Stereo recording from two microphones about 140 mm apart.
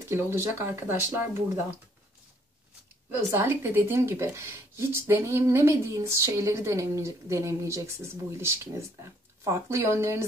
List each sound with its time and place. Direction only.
0.0 s speech: 20° right (ahead or behind)
3.3 s speech: 15° right (ahead or behind)